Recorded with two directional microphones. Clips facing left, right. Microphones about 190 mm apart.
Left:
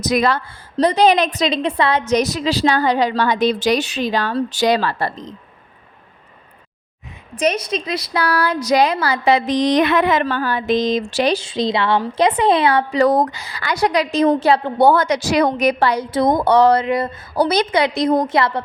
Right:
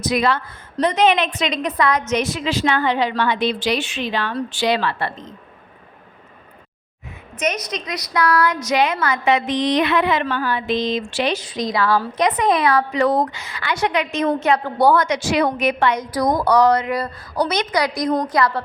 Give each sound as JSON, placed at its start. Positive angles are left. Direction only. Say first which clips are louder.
{"t": 0.0, "sound": "a woman's voice", "louder": "left 2 dB", "side_deg": 40}
{"t": 7.3, "sound": "a woman's voice", "louder": "left 5 dB", "side_deg": 30}
{"t": 9.5, "sound": "a sound", "louder": "left 3 dB", "side_deg": 40}
{"t": 11.1, "sound": "a woman's voice", "louder": "left 4 dB", "side_deg": 35}